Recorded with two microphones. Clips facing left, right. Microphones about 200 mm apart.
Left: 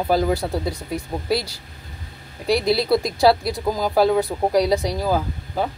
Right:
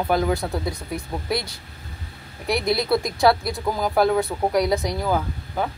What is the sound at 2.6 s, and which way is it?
Speech, 30° left (ahead or behind).